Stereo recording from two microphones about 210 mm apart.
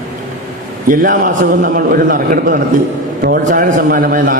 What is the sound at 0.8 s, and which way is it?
A man's voice, 40° right (ahead or behind).